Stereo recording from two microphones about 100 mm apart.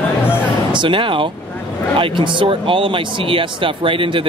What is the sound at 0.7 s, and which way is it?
Speech, 55° right (ahead or behind).